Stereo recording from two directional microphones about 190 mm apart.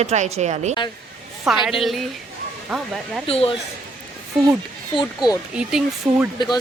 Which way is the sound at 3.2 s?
30° left (ahead or behind).